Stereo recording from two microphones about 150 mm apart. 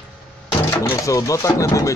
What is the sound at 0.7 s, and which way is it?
Speech, 15° left (ahead or behind).